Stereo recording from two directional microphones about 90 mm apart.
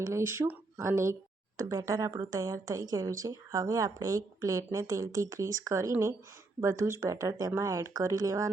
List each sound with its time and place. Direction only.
0.0 s speech: 30° right (ahead or behind)